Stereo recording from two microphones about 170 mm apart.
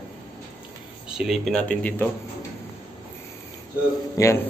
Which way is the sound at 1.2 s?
Centre (ahead or behind).